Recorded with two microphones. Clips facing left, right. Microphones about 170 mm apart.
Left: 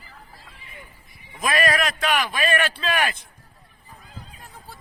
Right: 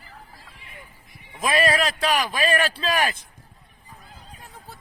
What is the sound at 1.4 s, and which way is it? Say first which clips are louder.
A man's voice: right 1 dB; 30° right (ahead or behind).